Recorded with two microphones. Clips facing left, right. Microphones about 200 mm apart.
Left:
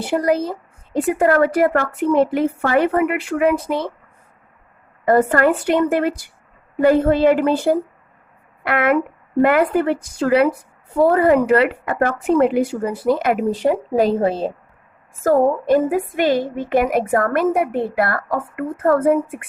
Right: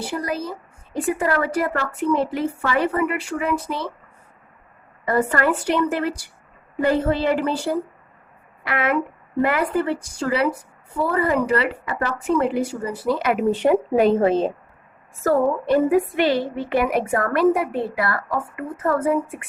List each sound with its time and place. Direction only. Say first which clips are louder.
0.1 s a woman's voice: left 12 dB; 55° left (ahead or behind)
5.0 s a woman's voice: left 5 dB; 50° left (ahead or behind); by 14.5 s 35° left (ahead or behind)
15.2 s a woman's voice: left 3 dB; 45° left (ahead or behind)